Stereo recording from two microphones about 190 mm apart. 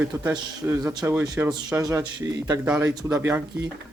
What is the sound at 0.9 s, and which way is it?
A man's voice, 20° right (ahead or behind).